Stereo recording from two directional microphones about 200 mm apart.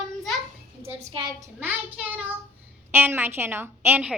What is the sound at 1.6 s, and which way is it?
A child's voice, 10° right (ahead or behind).